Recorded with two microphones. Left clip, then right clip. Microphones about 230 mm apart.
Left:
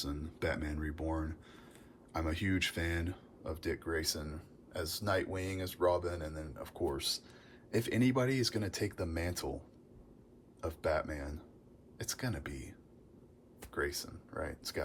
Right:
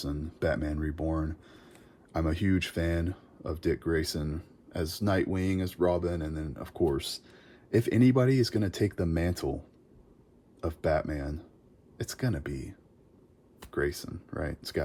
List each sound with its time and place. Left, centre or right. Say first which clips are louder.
0.0 s speech: right 6 dB; right
10.6 s speech: right 6 dB; right